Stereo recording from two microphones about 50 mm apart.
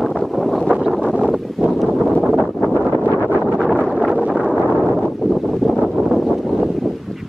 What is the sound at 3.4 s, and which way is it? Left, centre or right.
Wind noise, centre.